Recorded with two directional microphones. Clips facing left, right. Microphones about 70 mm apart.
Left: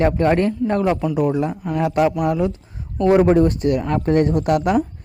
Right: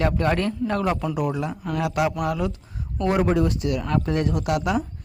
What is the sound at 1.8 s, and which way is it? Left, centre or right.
Speech, left.